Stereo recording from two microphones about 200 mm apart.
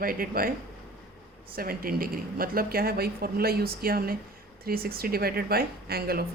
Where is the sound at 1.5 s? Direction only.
45° right (ahead or behind).